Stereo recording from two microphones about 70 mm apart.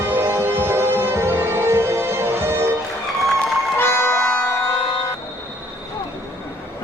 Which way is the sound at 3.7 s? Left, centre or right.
Left.